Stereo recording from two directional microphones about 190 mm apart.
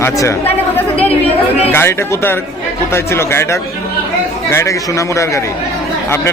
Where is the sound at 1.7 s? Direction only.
10° left (ahead or behind).